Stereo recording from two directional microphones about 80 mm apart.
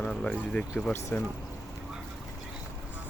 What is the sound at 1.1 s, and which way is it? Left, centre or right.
Speech, left.